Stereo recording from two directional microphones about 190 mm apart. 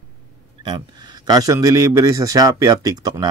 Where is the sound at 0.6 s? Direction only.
25° right (ahead or behind).